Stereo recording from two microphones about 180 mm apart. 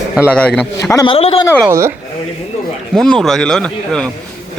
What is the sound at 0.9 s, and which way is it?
Speech, 25° left (ahead or behind).